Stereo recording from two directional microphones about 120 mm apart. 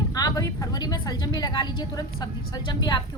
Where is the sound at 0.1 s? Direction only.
30° left (ahead or behind).